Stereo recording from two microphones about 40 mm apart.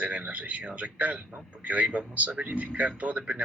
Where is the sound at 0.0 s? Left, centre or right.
Right.